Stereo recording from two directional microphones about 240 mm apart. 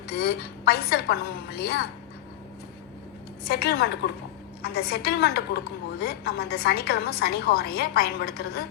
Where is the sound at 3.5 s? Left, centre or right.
Left.